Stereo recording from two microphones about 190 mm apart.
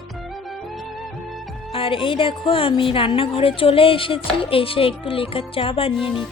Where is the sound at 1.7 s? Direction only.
30° left (ahead or behind).